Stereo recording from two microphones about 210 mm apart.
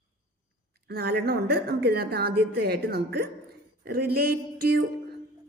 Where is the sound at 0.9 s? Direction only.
50° right (ahead or behind).